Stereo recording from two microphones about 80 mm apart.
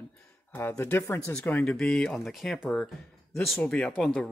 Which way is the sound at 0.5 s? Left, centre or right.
Left.